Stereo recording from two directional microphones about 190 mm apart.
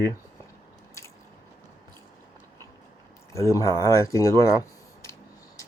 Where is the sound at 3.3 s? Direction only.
15° left (ahead or behind).